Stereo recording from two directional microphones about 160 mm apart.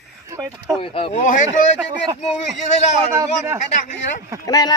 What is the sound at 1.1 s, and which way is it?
Speech, 50° left (ahead or behind).